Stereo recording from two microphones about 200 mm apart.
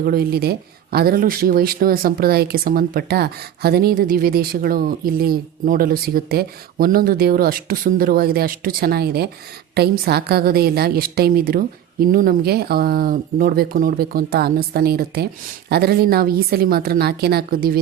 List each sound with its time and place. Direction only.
0.0 s speech: 50° right (ahead or behind)